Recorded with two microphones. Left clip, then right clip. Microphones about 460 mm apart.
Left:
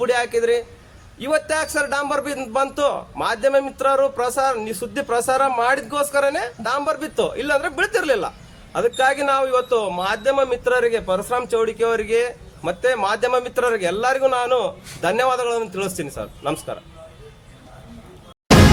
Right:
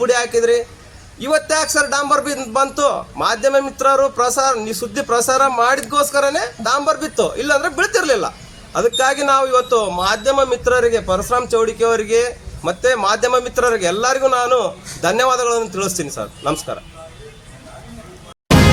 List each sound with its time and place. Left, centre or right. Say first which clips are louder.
0.0 s a man's voice: right 4 dB; left